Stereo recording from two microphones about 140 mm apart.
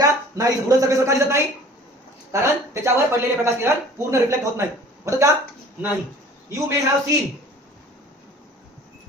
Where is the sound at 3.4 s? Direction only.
20° right (ahead or behind).